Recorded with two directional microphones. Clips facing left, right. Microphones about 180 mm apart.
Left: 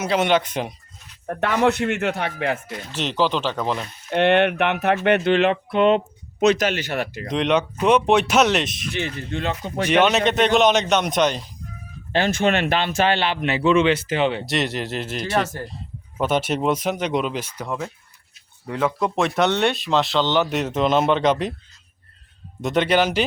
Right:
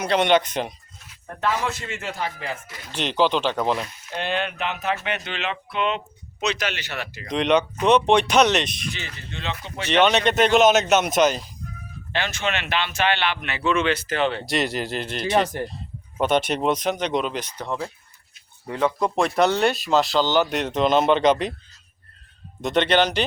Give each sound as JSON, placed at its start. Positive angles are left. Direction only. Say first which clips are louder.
{"t": 0.0, "sound": "speech", "louder": "even", "side_deg": 5}
{"t": 1.4, "sound": "speech", "louder": "left 6 dB", "side_deg": 65}
{"t": 2.9, "sound": "speech", "louder": "right 1 dB", "side_deg": 0}
{"t": 4.1, "sound": "speech", "louder": "left 10 dB", "side_deg": 65}
{"t": 7.3, "sound": "speech", "louder": "right 1 dB", "side_deg": 0}
{"t": 8.9, "sound": "speech", "louder": "left 8 dB", "side_deg": 55}
{"t": 9.8, "sound": "speech", "louder": "left 1 dB", "side_deg": 5}
{"t": 12.1, "sound": "speech", "louder": "left 7 dB", "side_deg": 45}
{"t": 14.4, "sound": "speech", "louder": "even", "side_deg": 0}
{"t": 15.3, "sound": "speech", "louder": "right 3 dB", "side_deg": -15}
{"t": 16.2, "sound": "speech", "louder": "even", "side_deg": 5}
{"t": 18.7, "sound": "speech", "louder": "even", "side_deg": 0}
{"t": 22.6, "sound": "speech", "louder": "left 1 dB", "side_deg": 10}